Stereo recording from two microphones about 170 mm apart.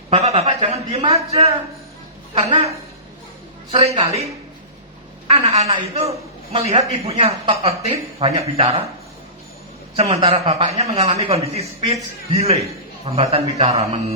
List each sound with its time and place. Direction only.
0.1 s a man's voice: 35° right (ahead or behind)
5.3 s a man's voice: 40° right (ahead or behind)
9.9 s a man's voice: 35° right (ahead or behind)